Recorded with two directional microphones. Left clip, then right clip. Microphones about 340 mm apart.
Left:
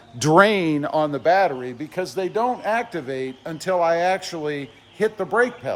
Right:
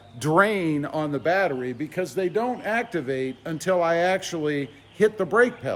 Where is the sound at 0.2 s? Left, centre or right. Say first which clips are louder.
Left 5 dB; left.